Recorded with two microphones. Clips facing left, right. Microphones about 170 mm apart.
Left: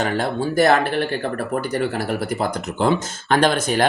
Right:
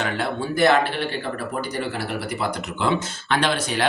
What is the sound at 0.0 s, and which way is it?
Speech, 40° left (ahead or behind).